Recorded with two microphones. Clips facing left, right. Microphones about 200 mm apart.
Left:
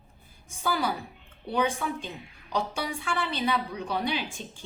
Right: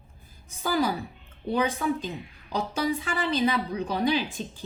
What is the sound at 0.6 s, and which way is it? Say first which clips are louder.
A woman's voice: right 3 dB; 40° right (ahead or behind).